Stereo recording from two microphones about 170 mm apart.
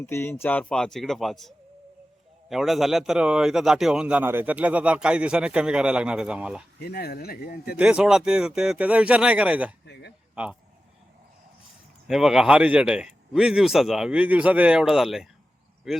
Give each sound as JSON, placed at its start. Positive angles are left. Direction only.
{"t": 0.0, "sound": "a man's voice", "side_deg": 15}
{"t": 6.7, "sound": "speech", "side_deg": 65}
{"t": 7.8, "sound": "speech", "side_deg": -5}
{"t": 9.8, "sound": "speech", "side_deg": 90}
{"t": 10.3, "sound": "speech", "side_deg": -5}
{"t": 12.0, "sound": "a man's voice", "side_deg": 0}